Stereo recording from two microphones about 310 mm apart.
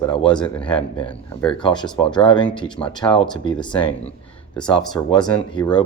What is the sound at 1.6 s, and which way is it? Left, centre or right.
Speech, centre.